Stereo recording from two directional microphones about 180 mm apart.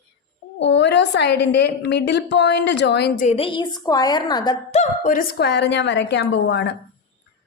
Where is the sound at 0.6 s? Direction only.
80° left.